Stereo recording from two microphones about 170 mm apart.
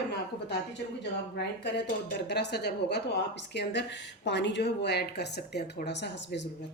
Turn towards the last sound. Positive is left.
turn(degrees=90)